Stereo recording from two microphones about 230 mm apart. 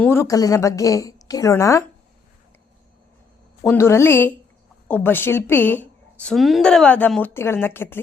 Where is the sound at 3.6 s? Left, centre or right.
Centre.